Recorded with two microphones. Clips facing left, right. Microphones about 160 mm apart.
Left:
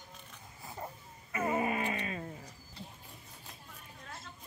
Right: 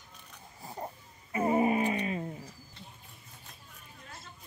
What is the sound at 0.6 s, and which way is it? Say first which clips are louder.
Wild animals: right 3 dB; 30° right (ahead or behind).